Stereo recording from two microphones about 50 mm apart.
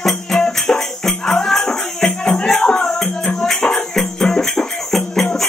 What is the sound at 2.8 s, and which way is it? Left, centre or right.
Music, centre.